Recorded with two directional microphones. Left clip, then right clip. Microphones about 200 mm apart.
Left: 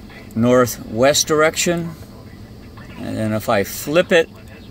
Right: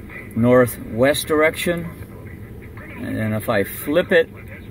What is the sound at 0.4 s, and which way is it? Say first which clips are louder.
Speech: even; 40° left (ahead or behind).